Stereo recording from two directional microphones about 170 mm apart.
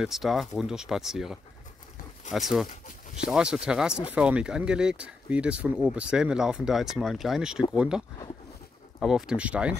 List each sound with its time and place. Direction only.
0.0 s speech: centre (ahead or behind)
9.0 s speech: 5° right (ahead or behind)